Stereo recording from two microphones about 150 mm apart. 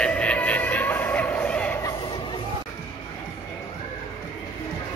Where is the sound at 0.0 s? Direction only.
10° left (ahead or behind).